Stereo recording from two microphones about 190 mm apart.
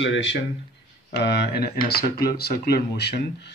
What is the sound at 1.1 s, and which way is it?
Speech, 60° left (ahead or behind).